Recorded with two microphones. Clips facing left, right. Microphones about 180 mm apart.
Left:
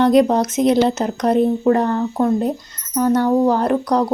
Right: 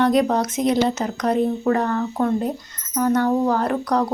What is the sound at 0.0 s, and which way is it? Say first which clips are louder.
Speech: left 4 dB; 25° left (ahead or behind).